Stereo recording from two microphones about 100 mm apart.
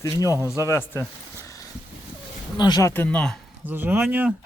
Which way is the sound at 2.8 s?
20° left (ahead or behind).